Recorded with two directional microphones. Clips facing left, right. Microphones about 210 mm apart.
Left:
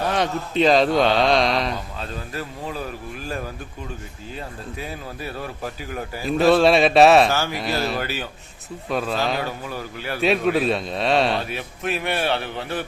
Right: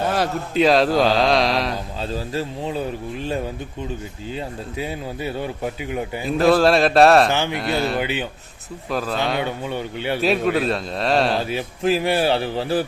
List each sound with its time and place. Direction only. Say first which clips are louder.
0.0 s speech: right 1 dB; 5° right (ahead or behind)
2.0 s speech: right 6 dB; 30° right (ahead or behind)
6.2 s speech: even; centre (ahead or behind)
9.6 s speech: right 5 dB; 25° right (ahead or behind)
10.2 s speech: left 1 dB; centre (ahead or behind)
11.4 s speech: right 7 dB; 30° right (ahead or behind)